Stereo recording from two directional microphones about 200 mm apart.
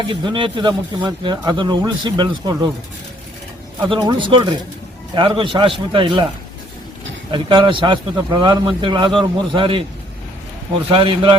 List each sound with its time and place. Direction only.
0.0 s speech: 25° right (ahead or behind)
3.8 s speech: 25° right (ahead or behind)
7.3 s speech: 25° right (ahead or behind)
10.9 s speech: 25° right (ahead or behind)